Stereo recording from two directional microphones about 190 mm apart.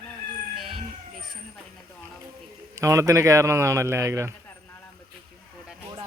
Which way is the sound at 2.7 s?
15° right (ahead or behind).